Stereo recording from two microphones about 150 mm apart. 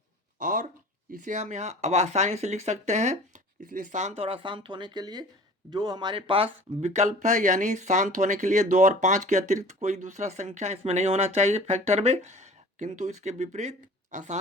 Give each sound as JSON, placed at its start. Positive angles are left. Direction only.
{"t": 0.3, "sound": "a sound", "side_deg": -60}
{"t": 1.1, "sound": "speech", "side_deg": -55}
{"t": 3.6, "sound": "speech", "side_deg": -65}